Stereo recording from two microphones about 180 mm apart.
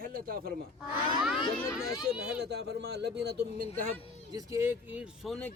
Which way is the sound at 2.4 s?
65° right (ahead or behind).